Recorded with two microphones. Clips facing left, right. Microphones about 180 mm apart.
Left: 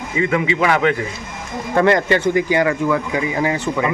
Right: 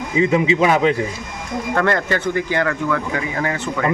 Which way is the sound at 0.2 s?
25° right (ahead or behind).